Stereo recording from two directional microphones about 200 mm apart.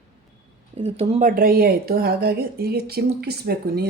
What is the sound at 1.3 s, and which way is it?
A woman's voice, 45° right (ahead or behind).